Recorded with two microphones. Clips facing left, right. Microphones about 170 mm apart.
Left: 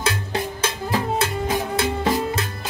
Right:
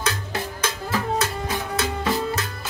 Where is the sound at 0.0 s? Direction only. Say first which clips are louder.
Left 3 dB; 25° left (ahead or behind).